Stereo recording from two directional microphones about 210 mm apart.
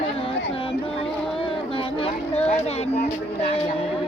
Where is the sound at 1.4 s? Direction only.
25° left (ahead or behind).